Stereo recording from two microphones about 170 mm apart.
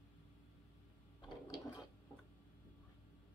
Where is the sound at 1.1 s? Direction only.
25° left (ahead or behind).